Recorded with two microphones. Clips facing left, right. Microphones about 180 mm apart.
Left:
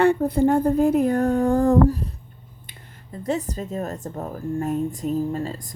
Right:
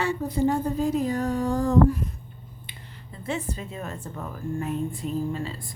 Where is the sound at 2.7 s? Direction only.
45° left (ahead or behind).